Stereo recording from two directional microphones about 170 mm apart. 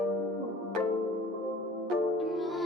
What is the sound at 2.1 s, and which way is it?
Music, centre (ahead or behind).